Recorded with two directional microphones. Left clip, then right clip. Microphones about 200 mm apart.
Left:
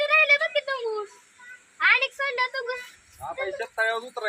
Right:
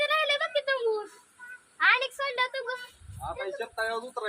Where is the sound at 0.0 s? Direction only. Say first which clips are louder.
Left 6 dB; 45° right (ahead or behind).